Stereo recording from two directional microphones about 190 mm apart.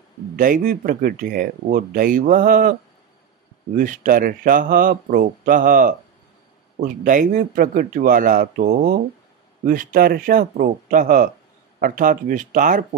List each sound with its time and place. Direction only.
0.4 s speech: 45° right (ahead or behind)
3.7 s speech: 45° right (ahead or behind)